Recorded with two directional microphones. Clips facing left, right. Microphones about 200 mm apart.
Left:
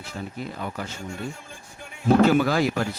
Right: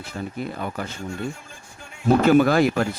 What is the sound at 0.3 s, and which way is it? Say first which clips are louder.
Speech: right 3 dB; 55° right (ahead or behind).